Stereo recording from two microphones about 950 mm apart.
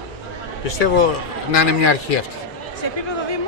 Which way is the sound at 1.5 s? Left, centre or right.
Left.